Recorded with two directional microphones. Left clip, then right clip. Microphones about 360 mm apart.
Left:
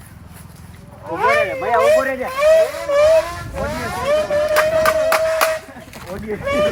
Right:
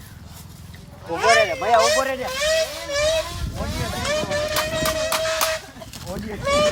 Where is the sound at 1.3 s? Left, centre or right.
Right.